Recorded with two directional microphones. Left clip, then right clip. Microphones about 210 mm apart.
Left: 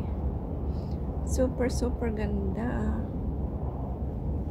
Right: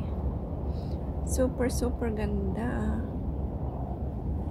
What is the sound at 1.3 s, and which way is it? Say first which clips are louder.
A woman's voice: even; 5° right (ahead or behind).